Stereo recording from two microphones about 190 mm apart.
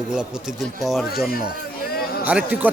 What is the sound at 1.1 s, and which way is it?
Speech, 55° left (ahead or behind).